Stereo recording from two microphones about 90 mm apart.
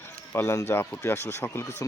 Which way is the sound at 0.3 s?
30° left (ahead or behind).